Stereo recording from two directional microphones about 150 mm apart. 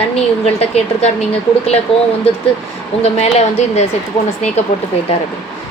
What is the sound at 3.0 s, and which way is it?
Speech, 45° left (ahead or behind).